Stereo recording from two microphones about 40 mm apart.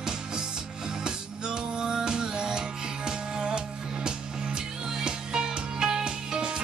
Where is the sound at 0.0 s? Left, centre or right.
Centre.